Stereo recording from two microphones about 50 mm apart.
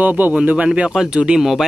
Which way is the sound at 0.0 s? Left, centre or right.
Right.